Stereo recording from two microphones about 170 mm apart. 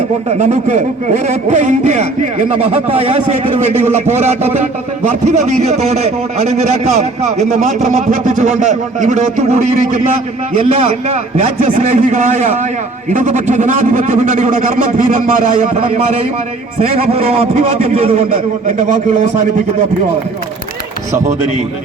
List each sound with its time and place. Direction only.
0.3 s a man's voice: 40° right (ahead or behind)
17.1 s a man's voice: 35° right (ahead or behind)